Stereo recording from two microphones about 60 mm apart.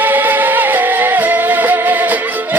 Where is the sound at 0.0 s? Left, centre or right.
Right.